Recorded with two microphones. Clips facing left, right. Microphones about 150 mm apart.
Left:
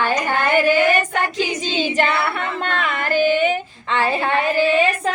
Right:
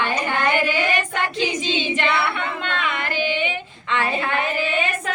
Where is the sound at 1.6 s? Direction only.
40° left (ahead or behind).